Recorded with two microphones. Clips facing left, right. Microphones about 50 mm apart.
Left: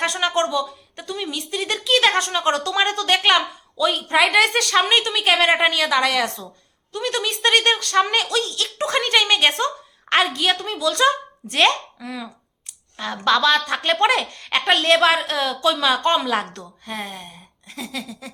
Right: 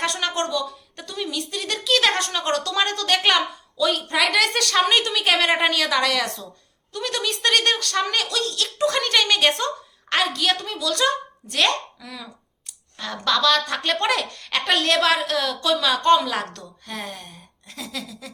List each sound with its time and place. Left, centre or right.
0.0 s a woman's voice: centre
8.8 s a woman's voice: left
10.1 s a woman's voice: left